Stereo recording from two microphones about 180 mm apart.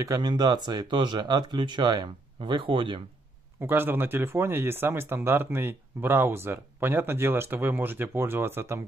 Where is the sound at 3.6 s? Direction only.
10° right (ahead or behind).